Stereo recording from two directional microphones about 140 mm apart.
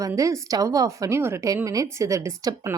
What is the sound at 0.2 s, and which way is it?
A woman's voice, 25° right (ahead or behind).